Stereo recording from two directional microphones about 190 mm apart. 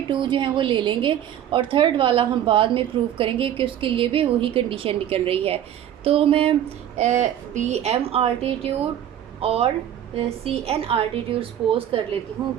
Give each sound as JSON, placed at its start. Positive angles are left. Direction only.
{"t": 0.1, "sound": "a woman's voice", "side_deg": -25}